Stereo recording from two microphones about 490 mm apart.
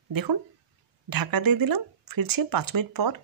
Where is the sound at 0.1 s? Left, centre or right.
Right.